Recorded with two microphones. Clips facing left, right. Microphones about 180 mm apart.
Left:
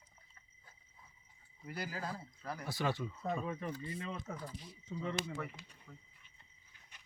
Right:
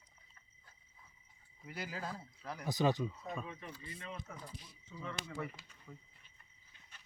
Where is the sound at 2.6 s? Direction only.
20° right (ahead or behind).